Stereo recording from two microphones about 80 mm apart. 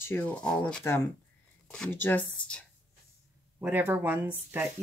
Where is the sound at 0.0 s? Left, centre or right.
Left.